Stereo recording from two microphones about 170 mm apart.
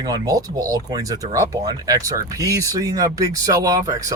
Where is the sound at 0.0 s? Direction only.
20° right (ahead or behind).